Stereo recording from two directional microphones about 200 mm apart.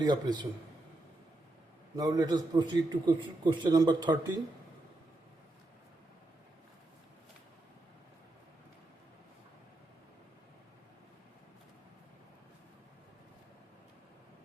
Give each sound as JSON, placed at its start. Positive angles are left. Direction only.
{"t": 0.0, "sound": "a man's voice", "side_deg": -20}
{"t": 2.0, "sound": "a man's voice", "side_deg": -20}